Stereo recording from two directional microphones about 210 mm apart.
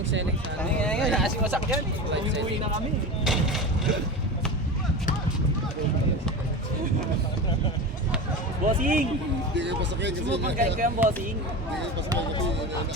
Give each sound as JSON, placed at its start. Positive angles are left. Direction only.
{"t": 0.6, "sound": "horse", "side_deg": 5}
{"t": 1.5, "sound": "speech", "side_deg": -5}
{"t": 3.2, "sound": "a sound", "side_deg": 0}
{"t": 8.6, "sound": "speech", "side_deg": -40}
{"t": 9.6, "sound": "speech", "side_deg": -55}